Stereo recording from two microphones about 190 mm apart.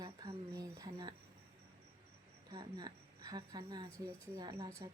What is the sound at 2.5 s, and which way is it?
Speech, 20° right (ahead or behind).